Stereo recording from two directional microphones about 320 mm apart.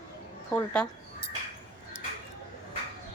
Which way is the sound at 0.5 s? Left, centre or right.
Centre.